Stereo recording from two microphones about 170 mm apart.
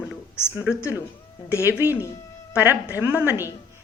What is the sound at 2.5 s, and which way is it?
Speech, 10° right (ahead or behind).